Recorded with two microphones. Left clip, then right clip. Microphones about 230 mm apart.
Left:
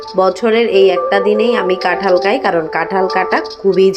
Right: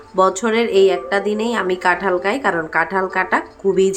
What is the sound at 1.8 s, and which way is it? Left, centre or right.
A woman's voice, centre.